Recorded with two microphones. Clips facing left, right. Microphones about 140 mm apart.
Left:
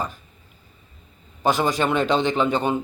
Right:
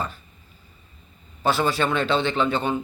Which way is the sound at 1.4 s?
15° left (ahead or behind).